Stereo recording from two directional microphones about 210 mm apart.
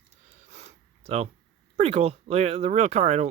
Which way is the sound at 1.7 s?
30° right (ahead or behind).